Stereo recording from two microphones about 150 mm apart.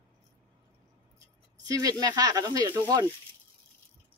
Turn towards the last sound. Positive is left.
turn(degrees=-25)  # may be behind; listen again after turning